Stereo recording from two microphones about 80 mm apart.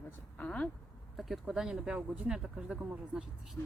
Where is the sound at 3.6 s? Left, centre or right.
Left.